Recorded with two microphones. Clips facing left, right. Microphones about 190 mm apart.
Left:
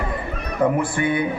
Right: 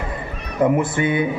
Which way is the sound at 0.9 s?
20° right (ahead or behind).